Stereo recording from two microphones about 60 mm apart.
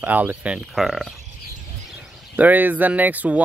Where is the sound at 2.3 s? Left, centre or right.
Right.